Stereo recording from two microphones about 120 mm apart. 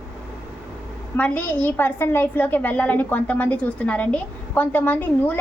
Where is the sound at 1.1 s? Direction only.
15° left (ahead or behind).